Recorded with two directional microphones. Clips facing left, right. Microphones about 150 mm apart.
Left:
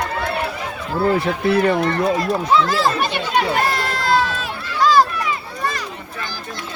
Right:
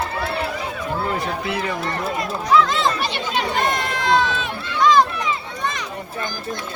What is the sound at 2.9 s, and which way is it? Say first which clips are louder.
Speech: left 4 dB; 50° left (ahead or behind).